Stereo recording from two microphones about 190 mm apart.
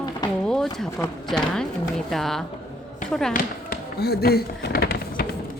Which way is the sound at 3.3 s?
55° left (ahead or behind).